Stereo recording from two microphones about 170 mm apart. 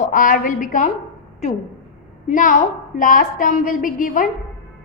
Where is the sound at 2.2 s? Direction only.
50° left (ahead or behind).